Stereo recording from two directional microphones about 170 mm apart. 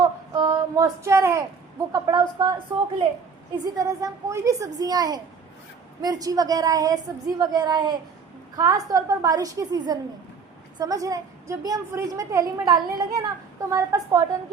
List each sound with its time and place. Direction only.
0.0 s child singing: 25° right (ahead or behind)
1.9 s a woman's voice: 25° right (ahead or behind)
3.6 s a woman's voice: 20° right (ahead or behind)